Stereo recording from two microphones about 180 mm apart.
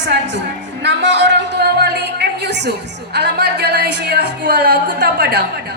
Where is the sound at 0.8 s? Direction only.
70° right (ahead or behind).